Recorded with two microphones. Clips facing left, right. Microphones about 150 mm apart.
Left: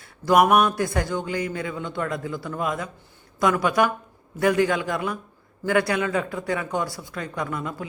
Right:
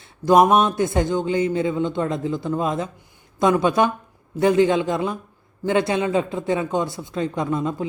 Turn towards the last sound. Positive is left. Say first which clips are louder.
# right 6 dB
turn(degrees=-25)  # may be behind; listen again after turning